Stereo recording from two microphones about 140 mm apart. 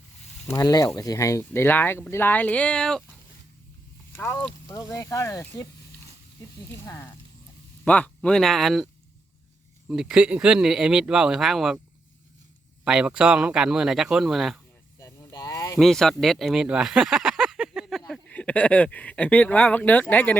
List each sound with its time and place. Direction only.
0.4 s speech: 25° left (ahead or behind); by 3.0 s 5° left (ahead or behind)
4.1 s speech: 15° left (ahead or behind)
6.7 s speech: 20° left (ahead or behind)
7.9 s speech: 10° left (ahead or behind)
9.9 s speech: 5° right (ahead or behind)
12.8 s speech: 5° right (ahead or behind)
14.9 s a sound: 20° left (ahead or behind)
15.8 s speech: 5° left (ahead or behind)
18.1 s speech: 10° left (ahead or behind)